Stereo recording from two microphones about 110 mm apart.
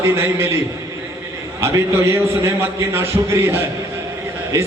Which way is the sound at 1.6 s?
20° right (ahead or behind).